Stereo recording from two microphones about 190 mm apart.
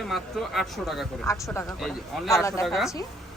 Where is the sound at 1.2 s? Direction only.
15° left (ahead or behind).